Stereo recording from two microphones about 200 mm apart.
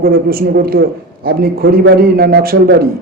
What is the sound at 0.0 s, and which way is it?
A man's voice, 45° right (ahead or behind).